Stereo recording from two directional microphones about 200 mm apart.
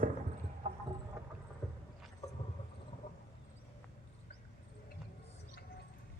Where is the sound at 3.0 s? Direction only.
40° left (ahead or behind).